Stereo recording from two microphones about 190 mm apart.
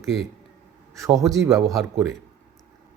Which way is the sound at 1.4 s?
15° right (ahead or behind).